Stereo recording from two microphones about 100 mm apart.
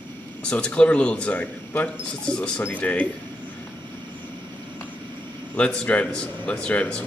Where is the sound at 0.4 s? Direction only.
10° left (ahead or behind).